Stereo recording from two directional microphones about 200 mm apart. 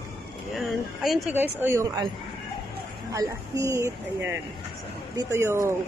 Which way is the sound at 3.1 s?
15° right (ahead or behind).